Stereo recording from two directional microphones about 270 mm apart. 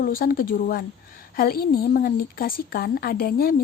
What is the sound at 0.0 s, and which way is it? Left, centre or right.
A woman's voice, left.